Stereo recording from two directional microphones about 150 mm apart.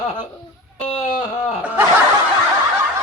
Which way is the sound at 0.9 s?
45° left (ahead or behind).